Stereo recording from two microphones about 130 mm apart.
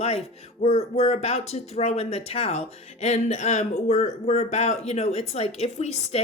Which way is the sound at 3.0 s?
60° left (ahead or behind).